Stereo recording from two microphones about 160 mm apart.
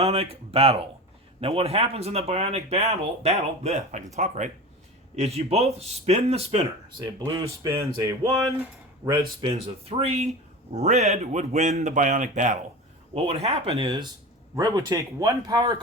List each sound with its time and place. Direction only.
0.0 s speech: 40° right (ahead or behind)
7.3 s speech: 20° right (ahead or behind)
9.0 s speech: 35° right (ahead or behind)
14.5 s speech: 20° right (ahead or behind)